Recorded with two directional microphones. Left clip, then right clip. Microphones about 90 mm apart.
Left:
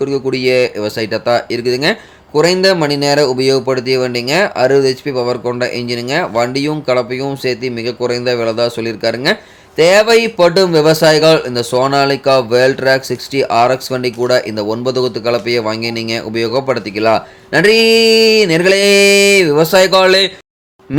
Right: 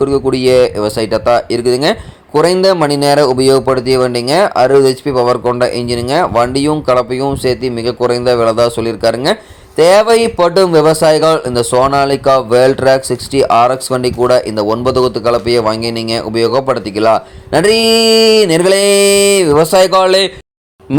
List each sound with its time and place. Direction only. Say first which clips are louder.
0.0 s speech: right 3 dB; 35° right (ahead or behind)